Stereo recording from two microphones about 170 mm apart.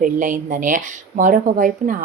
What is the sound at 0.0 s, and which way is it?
Speech, 50° right (ahead or behind).